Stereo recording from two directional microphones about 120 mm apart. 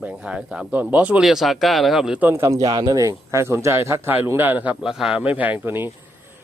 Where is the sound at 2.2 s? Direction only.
15° right (ahead or behind).